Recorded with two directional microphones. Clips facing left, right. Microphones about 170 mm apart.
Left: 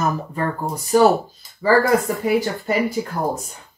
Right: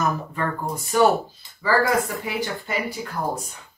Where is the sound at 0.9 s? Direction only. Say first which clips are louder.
Left 4 dB; 35° left (ahead or behind).